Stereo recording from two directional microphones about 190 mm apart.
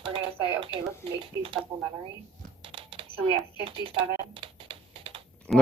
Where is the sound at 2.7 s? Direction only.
30° right (ahead or behind).